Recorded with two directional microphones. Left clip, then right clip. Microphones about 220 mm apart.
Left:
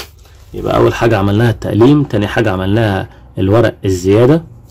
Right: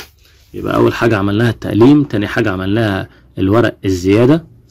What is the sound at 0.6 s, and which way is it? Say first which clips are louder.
Speech: left 2 dB; 25° right (ahead or behind).